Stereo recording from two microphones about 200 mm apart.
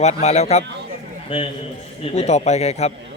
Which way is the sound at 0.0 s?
35° left (ahead or behind).